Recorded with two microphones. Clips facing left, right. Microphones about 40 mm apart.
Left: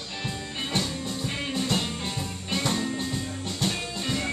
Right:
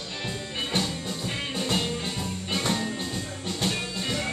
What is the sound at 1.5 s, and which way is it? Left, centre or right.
Music, centre.